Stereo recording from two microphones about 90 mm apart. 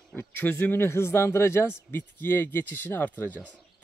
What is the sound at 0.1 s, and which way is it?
Speech, 20° left (ahead or behind).